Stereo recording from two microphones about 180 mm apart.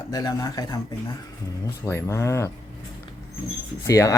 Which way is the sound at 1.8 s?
15° left (ahead or behind).